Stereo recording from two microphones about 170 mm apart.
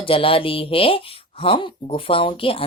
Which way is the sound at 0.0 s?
30° left (ahead or behind).